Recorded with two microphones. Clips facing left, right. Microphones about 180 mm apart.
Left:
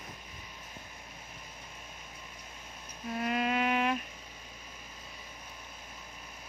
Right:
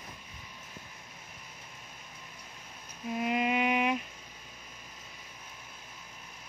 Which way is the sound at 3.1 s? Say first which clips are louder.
Right 2 dB; 15° right (ahead or behind).